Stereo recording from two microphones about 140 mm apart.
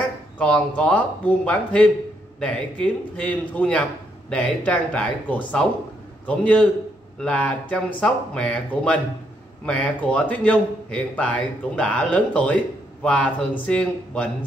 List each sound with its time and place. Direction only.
0.4 s speech: 10° left (ahead or behind)